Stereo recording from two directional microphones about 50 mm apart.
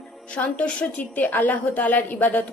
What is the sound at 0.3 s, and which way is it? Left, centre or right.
A woman's voice, left.